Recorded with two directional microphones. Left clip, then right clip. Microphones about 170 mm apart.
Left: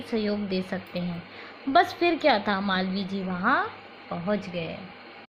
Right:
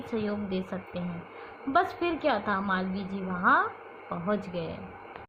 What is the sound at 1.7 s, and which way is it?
A woman's voice, 25° left (ahead or behind).